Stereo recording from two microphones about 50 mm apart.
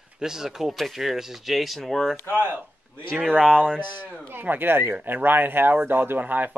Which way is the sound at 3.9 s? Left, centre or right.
Left.